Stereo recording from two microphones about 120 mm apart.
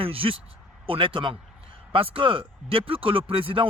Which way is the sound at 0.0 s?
50° right (ahead or behind).